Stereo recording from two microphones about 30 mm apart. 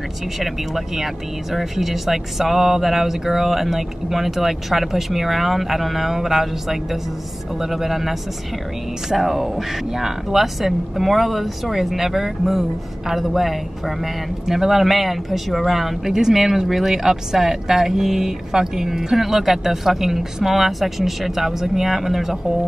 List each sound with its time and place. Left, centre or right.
0.4 s speech: centre
16.1 s speech: centre